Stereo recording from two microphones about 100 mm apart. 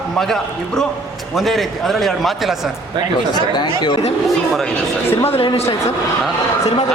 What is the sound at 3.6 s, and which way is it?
Speech, 45° left (ahead or behind).